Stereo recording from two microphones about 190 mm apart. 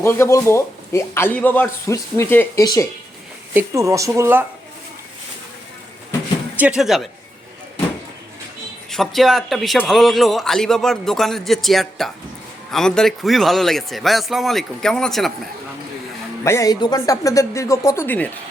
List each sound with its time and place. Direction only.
0.0 s a man's voice: 15° left (ahead or behind)
3.5 s speech: 15° right (ahead or behind)
6.6 s a man's voice: 5° right (ahead or behind)
8.9 s a man's voice: centre (ahead or behind)
16.4 s a man's voice: 15° left (ahead or behind)